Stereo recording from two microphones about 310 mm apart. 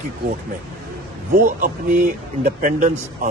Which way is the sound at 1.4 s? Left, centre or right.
Right.